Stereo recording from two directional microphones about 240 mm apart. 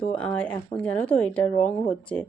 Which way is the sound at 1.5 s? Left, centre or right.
Left.